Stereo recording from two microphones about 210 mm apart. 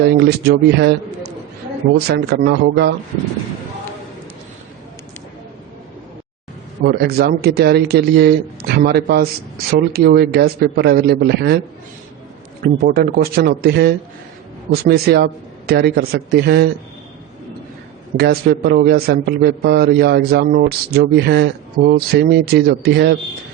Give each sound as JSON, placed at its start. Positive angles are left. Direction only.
{"t": 0.0, "sound": "speech", "side_deg": -50}
{"t": 2.0, "sound": "speech", "side_deg": -50}
{"t": 6.8, "sound": "speech", "side_deg": -50}
{"t": 12.6, "sound": "speech", "side_deg": -45}
{"t": 18.2, "sound": "speech", "side_deg": -50}